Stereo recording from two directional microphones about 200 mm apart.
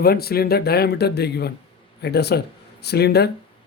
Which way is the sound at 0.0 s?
50° left (ahead or behind).